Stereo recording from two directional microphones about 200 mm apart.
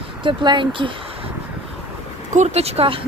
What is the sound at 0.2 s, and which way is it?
Speech, 25° right (ahead or behind).